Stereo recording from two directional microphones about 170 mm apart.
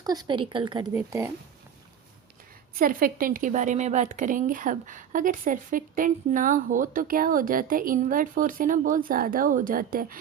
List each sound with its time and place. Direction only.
0.0 s a woman's voice: 25° right (ahead or behind)
0.9 s speech: 15° right (ahead or behind)
2.7 s speech: 55° right (ahead or behind)